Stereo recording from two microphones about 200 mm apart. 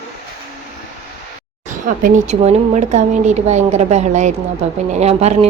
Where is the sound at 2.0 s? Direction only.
40° right (ahead or behind).